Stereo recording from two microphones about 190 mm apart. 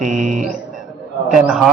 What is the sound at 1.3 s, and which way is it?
Speech, 5° right (ahead or behind).